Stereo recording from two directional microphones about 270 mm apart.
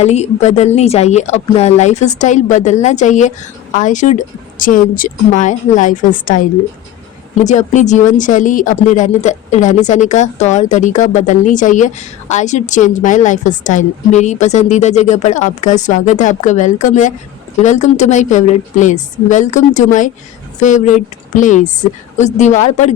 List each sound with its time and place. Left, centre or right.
0.0 s speech: left